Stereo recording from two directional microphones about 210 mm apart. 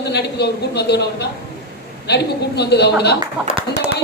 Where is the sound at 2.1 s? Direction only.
50° left (ahead or behind).